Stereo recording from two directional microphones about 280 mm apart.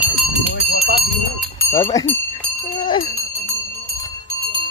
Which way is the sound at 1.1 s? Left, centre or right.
Centre.